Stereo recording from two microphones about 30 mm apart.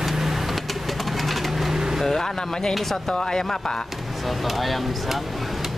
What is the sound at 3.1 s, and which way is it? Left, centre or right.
Speech, left.